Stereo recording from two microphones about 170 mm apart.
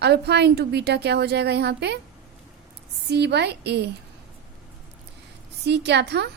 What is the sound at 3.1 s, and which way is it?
Speech, 75° right (ahead or behind).